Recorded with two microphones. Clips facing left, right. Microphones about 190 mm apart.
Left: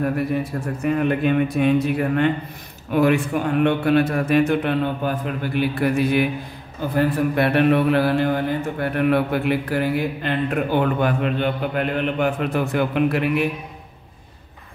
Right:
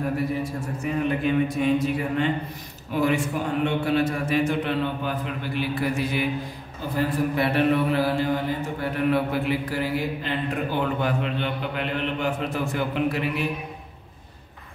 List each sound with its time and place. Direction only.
0.4 s a man's voice: 60° left (ahead or behind)